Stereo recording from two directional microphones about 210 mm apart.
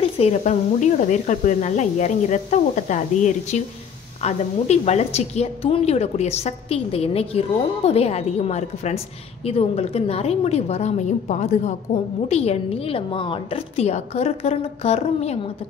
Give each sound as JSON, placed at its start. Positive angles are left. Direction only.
{"t": 0.2, "sound": "a woman's voice", "side_deg": 35}